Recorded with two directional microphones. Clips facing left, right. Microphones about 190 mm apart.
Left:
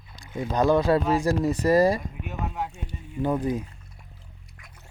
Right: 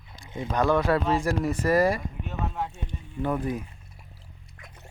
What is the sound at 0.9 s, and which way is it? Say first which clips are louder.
Speech: left 2 dB; 15° left (ahead or behind).